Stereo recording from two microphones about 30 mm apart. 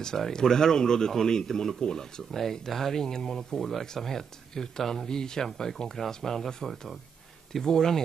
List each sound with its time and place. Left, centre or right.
0.0 s speech: centre
2.4 s speech: centre